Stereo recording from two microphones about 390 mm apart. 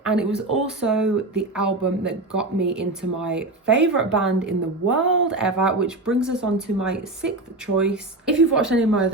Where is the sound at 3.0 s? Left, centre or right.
Right.